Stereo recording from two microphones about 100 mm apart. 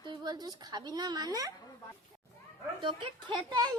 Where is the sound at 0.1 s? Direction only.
45° right (ahead or behind).